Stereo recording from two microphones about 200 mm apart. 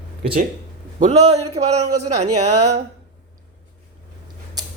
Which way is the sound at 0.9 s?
35° right (ahead or behind).